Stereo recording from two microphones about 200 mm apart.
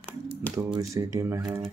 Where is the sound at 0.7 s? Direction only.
15° right (ahead or behind).